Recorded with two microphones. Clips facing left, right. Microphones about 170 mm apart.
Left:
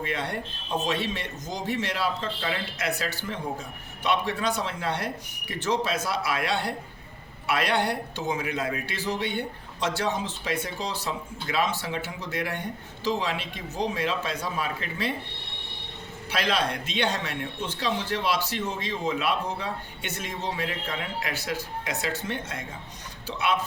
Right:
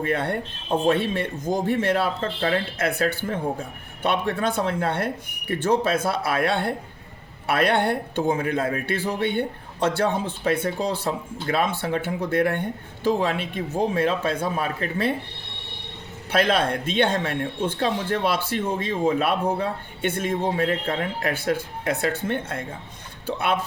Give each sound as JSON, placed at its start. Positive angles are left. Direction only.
{"t": 0.0, "sound": "a man's voice", "side_deg": -55}
{"t": 16.3, "sound": "a man's voice", "side_deg": -55}